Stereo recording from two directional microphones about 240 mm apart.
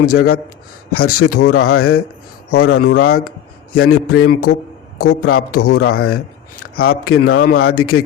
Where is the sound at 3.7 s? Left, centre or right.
Left.